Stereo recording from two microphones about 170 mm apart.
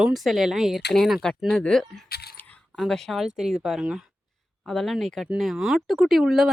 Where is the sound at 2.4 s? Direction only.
5° left (ahead or behind).